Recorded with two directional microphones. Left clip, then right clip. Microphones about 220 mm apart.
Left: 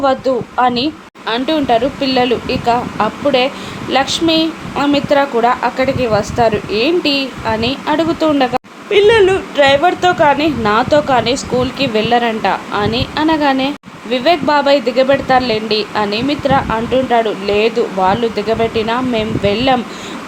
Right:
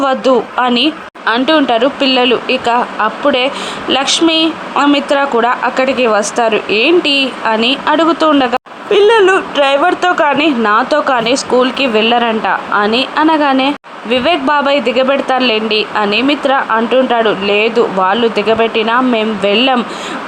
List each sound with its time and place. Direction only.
0.0 s a woman's voice: 15° right (ahead or behind)